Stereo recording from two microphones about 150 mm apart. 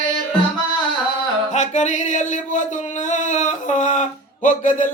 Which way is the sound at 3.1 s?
55° left (ahead or behind).